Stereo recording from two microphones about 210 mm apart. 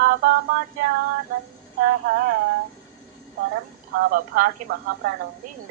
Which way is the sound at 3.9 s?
45° right (ahead or behind).